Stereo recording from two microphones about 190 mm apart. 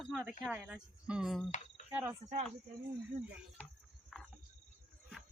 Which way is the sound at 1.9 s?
10° right (ahead or behind).